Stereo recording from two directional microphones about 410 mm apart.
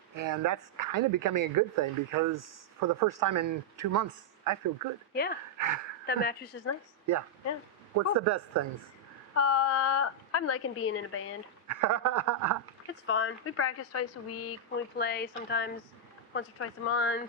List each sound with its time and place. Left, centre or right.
0.2 s speech: right
5.1 s speech: left
5.5 s speech: right
6.1 s speech: left
7.9 s speech: right
9.3 s a woman's voice: left
11.7 s speech: right
12.9 s a woman's voice: left
14.9 s speech: left